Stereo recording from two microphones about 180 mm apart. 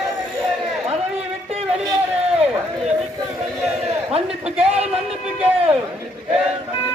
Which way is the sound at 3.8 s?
35° right (ahead or behind).